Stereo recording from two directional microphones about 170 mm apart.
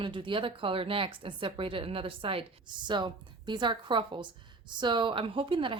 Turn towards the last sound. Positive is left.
turn(degrees=-30)  # may be behind; listen again after turning